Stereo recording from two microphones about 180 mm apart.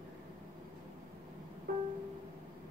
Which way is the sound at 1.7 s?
55° right (ahead or behind).